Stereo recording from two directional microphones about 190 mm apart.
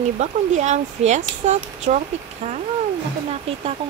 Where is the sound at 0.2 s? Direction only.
35° right (ahead or behind).